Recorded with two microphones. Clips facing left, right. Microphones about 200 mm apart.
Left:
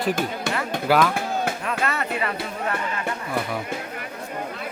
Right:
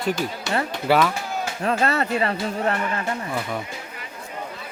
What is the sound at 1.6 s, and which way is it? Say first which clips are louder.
Speech: right 4 dB; 30° right (ahead or behind).